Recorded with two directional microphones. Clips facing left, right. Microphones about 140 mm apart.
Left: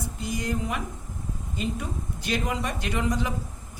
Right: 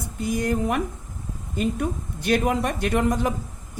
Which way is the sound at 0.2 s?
50° right (ahead or behind).